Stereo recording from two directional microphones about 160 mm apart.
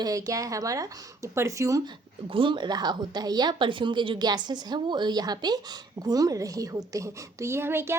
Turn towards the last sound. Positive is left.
turn(degrees=-15)  # may be behind; listen again after turning